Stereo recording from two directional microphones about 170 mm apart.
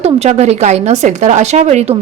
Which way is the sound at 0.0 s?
40° right (ahead or behind).